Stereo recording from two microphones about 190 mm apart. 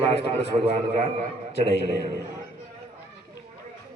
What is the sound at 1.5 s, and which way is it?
Speech, 65° left (ahead or behind).